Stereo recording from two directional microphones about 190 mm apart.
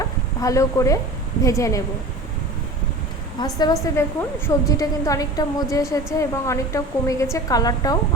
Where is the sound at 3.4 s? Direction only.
20° left (ahead or behind).